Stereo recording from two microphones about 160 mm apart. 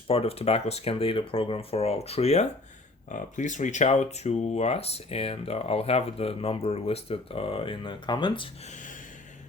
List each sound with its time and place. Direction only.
0.1 s speech: 40° left (ahead or behind)
8.6 s gasp: 50° left (ahead or behind)